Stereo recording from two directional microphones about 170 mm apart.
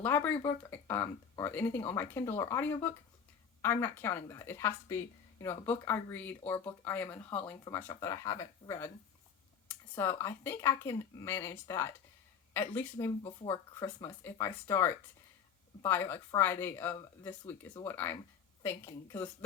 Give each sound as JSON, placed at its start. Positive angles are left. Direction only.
{"t": 0.0, "sound": "speech", "side_deg": 10}
{"t": 10.0, "sound": "speech", "side_deg": 15}